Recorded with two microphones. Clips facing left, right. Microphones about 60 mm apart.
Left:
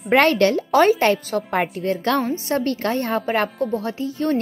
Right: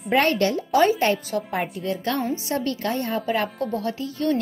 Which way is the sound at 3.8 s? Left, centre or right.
Left.